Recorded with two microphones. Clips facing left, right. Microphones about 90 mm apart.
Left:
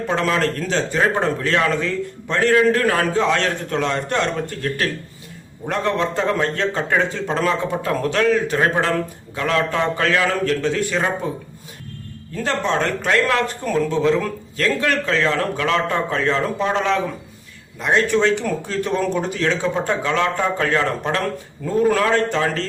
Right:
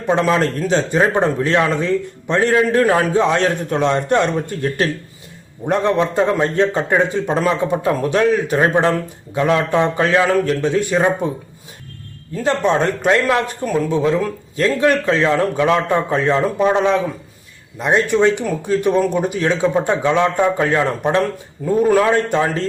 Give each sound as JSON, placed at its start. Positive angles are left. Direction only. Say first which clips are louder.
{"t": 0.1, "sound": "a man's voice", "louder": "right 5 dB", "side_deg": -20}
{"t": 12.4, "sound": "speech", "louder": "right 4 dB", "side_deg": -15}